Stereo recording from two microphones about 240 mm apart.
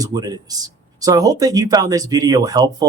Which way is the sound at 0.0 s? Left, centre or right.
Centre.